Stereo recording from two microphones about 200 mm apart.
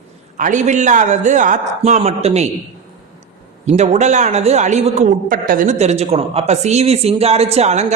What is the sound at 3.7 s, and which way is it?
A man's voice, 35° right (ahead or behind).